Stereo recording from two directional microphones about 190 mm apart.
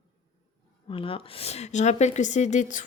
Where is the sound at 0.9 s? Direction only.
30° left (ahead or behind).